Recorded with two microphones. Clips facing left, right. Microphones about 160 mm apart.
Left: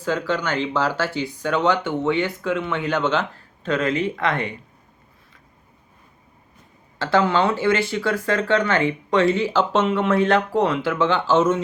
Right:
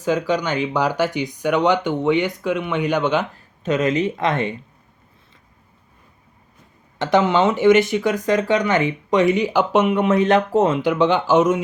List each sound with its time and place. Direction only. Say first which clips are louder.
0.0 s speech: right 3 dB; 15° right (ahead or behind)
7.0 s speech: right 2 dB; 20° right (ahead or behind)